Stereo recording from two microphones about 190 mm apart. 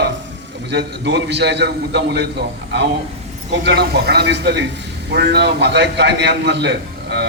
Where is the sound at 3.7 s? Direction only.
60° right (ahead or behind).